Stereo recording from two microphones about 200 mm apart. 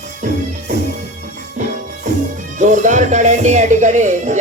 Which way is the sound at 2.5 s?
40° right (ahead or behind).